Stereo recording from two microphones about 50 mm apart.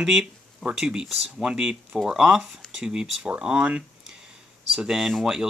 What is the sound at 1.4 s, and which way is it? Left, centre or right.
Speech, centre.